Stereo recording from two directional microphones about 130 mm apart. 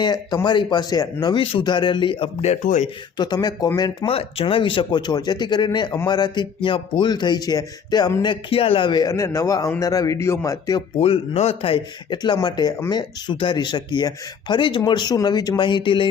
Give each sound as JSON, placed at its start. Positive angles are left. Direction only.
{"t": 0.0, "sound": "a man's voice", "side_deg": 30}
{"t": 2.5, "sound": "speech", "side_deg": 65}
{"t": 3.2, "sound": "a man's voice", "side_deg": 30}
{"t": 4.0, "sound": "a man's voice", "side_deg": 45}
{"t": 10.8, "sound": "speech", "side_deg": 45}
{"t": 12.1, "sound": "a man's voice", "side_deg": 35}